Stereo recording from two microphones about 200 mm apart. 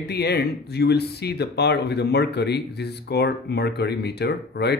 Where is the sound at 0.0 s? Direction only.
55° left (ahead or behind).